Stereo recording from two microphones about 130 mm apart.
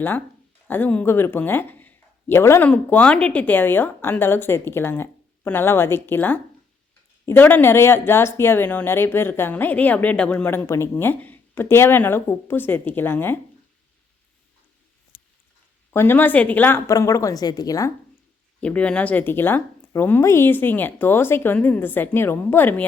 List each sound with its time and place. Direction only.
0.7 s speech: 10° left (ahead or behind)
15.9 s a woman's voice: 15° left (ahead or behind)
18.6 s speech: 10° left (ahead or behind)